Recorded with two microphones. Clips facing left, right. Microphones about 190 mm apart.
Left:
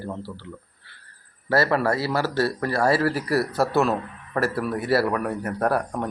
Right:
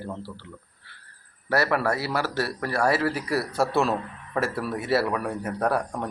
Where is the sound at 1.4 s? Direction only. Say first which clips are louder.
Left 3 dB; 20° left (ahead or behind).